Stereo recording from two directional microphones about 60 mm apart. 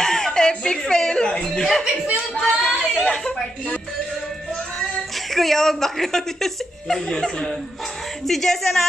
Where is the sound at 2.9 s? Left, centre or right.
Centre.